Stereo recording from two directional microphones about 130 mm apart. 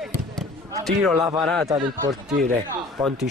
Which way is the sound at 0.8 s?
Centre (ahead or behind).